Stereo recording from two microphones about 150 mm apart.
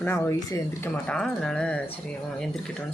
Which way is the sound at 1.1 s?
5° left (ahead or behind).